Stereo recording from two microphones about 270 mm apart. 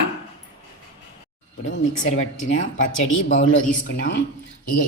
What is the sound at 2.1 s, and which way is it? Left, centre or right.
Speech, left.